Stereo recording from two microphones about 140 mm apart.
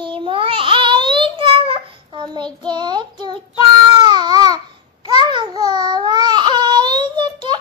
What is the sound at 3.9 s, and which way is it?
Baby cry, 30° right (ahead or behind).